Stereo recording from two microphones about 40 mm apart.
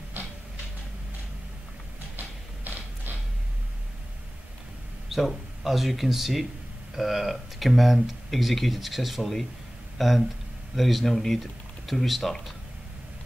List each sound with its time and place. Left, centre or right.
2.1 s music: right
5.1 s speech: centre